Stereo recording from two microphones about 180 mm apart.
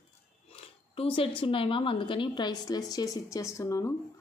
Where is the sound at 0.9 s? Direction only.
30° left (ahead or behind).